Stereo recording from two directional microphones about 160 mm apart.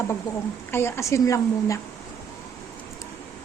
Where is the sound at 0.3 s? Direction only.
25° left (ahead or behind).